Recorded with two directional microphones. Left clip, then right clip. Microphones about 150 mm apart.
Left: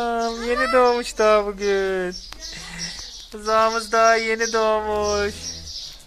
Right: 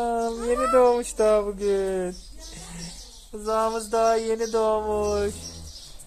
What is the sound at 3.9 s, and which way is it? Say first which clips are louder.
Speech: left 4 dB; 5° left (ahead or behind).